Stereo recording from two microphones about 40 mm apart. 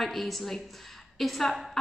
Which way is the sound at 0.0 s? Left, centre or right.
Centre.